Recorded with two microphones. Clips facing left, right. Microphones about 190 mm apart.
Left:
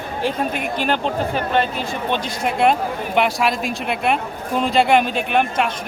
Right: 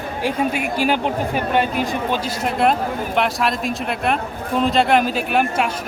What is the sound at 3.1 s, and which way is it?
Speech, centre (ahead or behind).